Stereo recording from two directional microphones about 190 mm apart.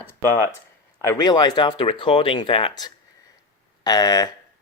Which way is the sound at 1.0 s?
20° left (ahead or behind).